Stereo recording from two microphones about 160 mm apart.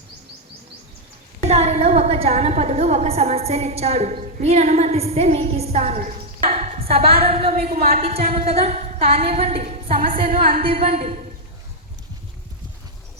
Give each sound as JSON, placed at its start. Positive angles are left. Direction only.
{"t": 1.4, "sound": "a woman's voice", "side_deg": -40}
{"t": 7.7, "sound": "a woman's voice", "side_deg": -70}
{"t": 7.9, "sound": "a woman's voice", "side_deg": -40}